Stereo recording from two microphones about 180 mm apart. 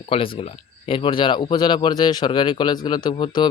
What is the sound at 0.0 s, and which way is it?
Speech, 30° left (ahead or behind).